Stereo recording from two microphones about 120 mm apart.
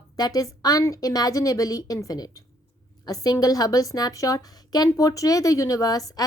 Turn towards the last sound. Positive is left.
turn(degrees=30)  # may be behind; listen again after turning